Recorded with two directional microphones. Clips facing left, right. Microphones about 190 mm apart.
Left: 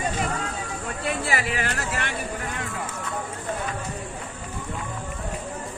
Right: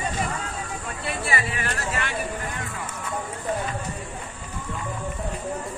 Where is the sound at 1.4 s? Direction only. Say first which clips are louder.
Left 2 dB; 80° left.